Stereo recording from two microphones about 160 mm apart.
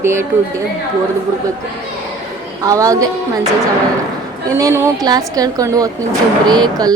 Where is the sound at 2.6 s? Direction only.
20° right (ahead or behind).